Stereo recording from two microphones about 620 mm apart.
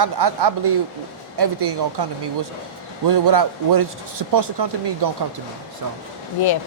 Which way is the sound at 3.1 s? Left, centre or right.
Right.